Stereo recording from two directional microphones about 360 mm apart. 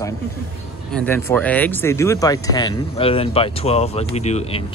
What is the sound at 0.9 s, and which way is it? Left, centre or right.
Speech, centre.